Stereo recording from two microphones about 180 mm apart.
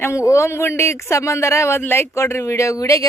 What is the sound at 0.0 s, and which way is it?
Speech, 15° left (ahead or behind).